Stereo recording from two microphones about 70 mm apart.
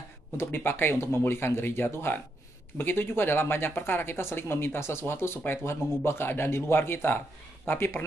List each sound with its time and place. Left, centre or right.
0.4 s speech: left